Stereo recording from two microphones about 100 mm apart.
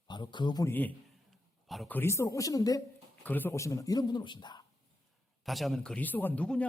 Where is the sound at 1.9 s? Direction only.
25° left (ahead or behind).